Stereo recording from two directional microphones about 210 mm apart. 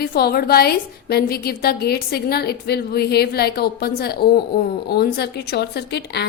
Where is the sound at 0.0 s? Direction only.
50° left (ahead or behind).